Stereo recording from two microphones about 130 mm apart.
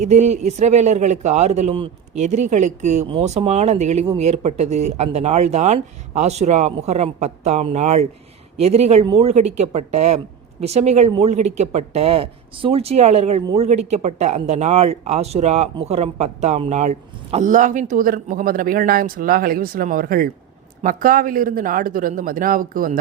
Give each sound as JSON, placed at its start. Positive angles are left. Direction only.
{"t": 0.0, "sound": "speech", "side_deg": -60}